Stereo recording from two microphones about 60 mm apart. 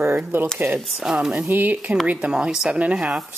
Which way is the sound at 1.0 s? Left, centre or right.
Centre.